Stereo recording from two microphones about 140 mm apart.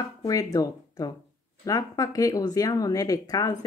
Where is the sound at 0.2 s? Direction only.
25° left (ahead or behind).